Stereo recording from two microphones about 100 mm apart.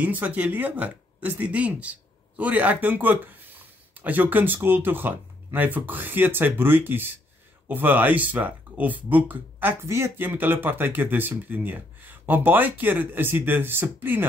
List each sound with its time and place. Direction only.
0.0 s speech: 15° right (ahead or behind)